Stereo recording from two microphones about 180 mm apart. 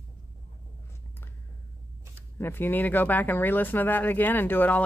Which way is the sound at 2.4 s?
10° left (ahead or behind).